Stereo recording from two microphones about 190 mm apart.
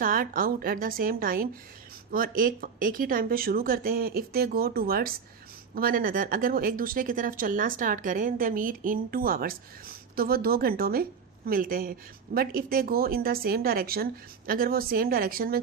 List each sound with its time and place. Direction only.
0.0 s speech: 50° right (ahead or behind)